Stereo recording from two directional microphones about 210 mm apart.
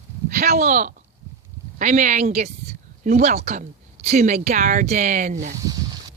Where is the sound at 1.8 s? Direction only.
35° right (ahead or behind).